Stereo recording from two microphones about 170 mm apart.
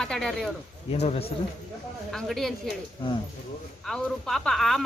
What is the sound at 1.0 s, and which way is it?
Speech, 35° left (ahead or behind).